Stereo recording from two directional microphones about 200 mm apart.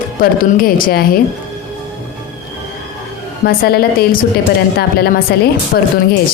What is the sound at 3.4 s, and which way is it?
A woman's voice, 50° left (ahead or behind).